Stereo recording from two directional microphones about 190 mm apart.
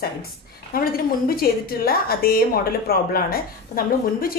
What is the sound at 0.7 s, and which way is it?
A woman's voice, 50° left (ahead or behind).